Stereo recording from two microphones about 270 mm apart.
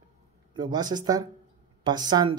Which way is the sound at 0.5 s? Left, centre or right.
Centre.